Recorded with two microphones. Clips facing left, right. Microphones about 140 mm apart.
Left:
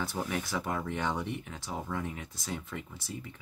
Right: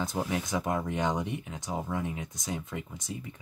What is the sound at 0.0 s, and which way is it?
Speech, 20° right (ahead or behind).